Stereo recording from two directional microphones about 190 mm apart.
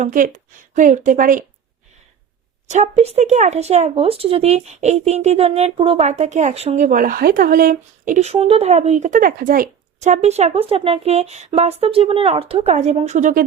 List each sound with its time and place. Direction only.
0.0 s a woman's voice: 45° right (ahead or behind)
2.6 s speech: 35° right (ahead or behind)